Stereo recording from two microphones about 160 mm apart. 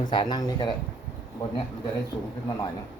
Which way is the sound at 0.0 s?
25° left (ahead or behind).